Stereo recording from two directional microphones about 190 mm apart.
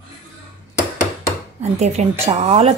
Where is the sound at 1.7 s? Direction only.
35° right (ahead or behind).